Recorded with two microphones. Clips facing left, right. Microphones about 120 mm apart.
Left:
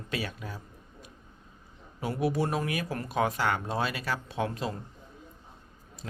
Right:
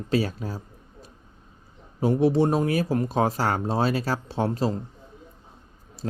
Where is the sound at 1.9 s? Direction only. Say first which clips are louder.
Right 8 dB; 30° right (ahead or behind).